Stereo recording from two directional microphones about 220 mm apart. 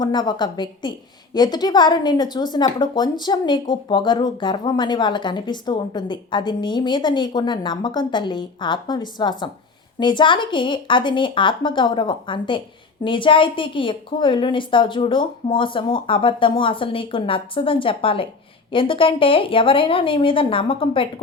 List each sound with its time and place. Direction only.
0.0 s a woman's voice: 20° left (ahead or behind)